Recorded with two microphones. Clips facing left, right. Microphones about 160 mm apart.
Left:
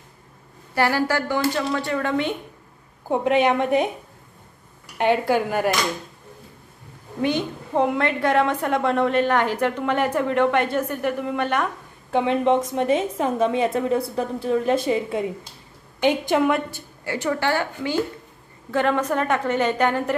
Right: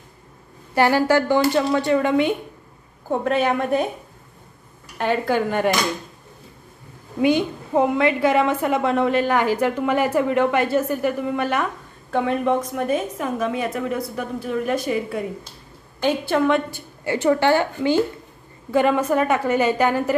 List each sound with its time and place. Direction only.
0.7 s speech: 20° right (ahead or behind)
3.1 s a woman's voice: 15° left (ahead or behind)
4.9 s a woman's voice: 15° left (ahead or behind)
7.2 s a woman's voice: 10° right (ahead or behind)
12.1 s a woman's voice: 20° left (ahead or behind)
17.0 s speech: 25° right (ahead or behind)
18.7 s a woman's voice: 10° right (ahead or behind)